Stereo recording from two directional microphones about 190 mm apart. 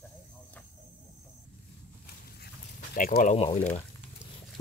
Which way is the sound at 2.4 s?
50° left (ahead or behind).